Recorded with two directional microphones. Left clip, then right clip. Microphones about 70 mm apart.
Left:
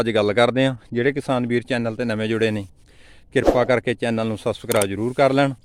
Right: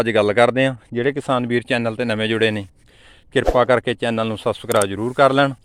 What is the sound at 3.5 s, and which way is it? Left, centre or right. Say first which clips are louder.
Speech: right 3 dB; centre.